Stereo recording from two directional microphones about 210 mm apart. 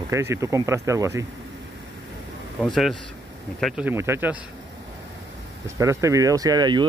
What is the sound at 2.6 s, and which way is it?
Speech, centre (ahead or behind).